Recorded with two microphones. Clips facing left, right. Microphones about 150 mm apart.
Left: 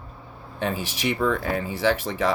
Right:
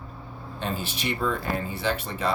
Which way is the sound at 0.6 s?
75° left (ahead or behind).